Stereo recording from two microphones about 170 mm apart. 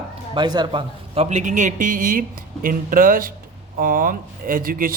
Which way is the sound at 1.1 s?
40° right (ahead or behind).